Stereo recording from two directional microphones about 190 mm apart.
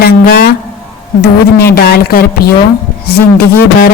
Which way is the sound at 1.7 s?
55° left (ahead or behind).